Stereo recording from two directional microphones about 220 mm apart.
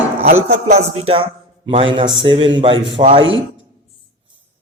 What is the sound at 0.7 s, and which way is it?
A man's voice, 25° right (ahead or behind).